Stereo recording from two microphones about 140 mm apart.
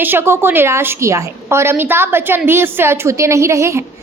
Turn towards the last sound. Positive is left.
turn(degrees=-20)  # may be behind; listen again after turning